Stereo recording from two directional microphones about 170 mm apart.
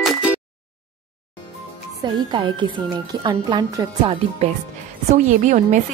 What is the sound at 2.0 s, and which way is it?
Speech, 30° right (ahead or behind).